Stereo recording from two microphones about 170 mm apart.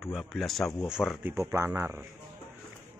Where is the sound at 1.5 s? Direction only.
15° right (ahead or behind).